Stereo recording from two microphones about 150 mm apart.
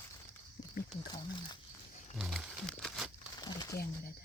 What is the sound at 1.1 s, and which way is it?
Speech, 30° left (ahead or behind).